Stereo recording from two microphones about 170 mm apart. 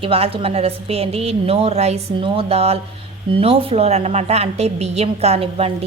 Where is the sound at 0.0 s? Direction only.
35° right (ahead or behind).